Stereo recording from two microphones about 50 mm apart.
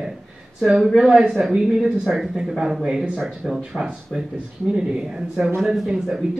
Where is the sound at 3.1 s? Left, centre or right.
Centre.